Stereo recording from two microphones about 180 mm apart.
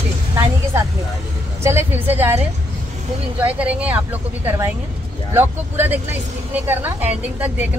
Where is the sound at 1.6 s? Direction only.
15° right (ahead or behind).